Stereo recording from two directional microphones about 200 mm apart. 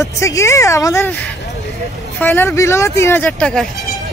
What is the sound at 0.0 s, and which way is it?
Speech, 15° left (ahead or behind).